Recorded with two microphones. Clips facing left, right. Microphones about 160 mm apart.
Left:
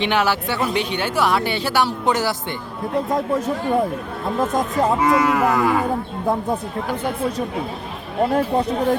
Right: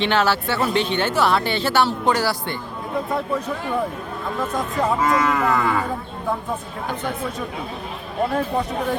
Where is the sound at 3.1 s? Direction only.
45° left (ahead or behind).